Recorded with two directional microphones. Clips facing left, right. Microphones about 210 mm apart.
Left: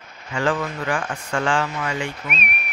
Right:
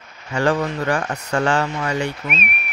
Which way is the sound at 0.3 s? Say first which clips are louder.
Right 4 dB; 40° right (ahead or behind).